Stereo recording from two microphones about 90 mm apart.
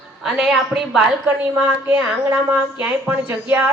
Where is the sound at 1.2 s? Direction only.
20° right (ahead or behind).